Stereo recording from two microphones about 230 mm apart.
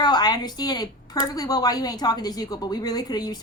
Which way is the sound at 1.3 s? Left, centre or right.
Centre.